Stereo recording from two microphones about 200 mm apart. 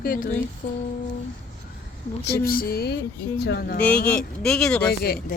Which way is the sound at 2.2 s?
50° left (ahead or behind).